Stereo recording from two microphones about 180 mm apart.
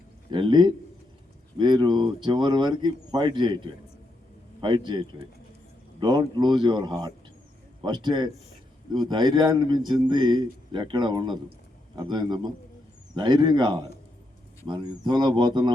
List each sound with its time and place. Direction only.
0.3 s a man's voice: 25° right (ahead or behind)